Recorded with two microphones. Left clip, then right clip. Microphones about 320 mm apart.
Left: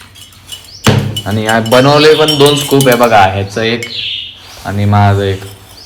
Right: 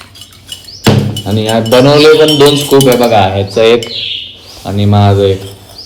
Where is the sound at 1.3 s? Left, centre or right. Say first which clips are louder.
Even; centre.